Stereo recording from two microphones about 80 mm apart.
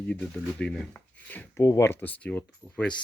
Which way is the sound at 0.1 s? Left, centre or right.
Centre.